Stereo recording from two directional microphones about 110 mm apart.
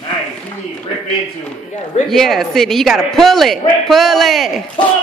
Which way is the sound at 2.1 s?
Centre (ahead or behind).